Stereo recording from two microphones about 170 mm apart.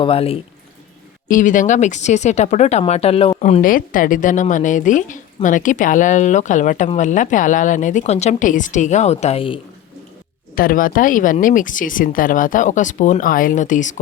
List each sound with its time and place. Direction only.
0.0 s speech: 35° left (ahead or behind)
1.3 s a woman's voice: 50° left (ahead or behind)
3.6 s a woman's voice: 55° left (ahead or behind); by 9.6 s 35° left (ahead or behind)
10.5 s a woman's voice: 55° left (ahead or behind)